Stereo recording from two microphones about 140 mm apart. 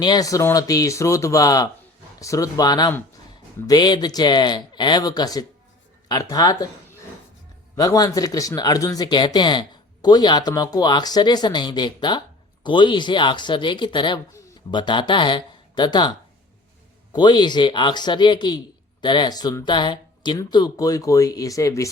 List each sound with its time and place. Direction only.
0.0 s speech: 25° left (ahead or behind)
7.8 s speech: 25° left (ahead or behind)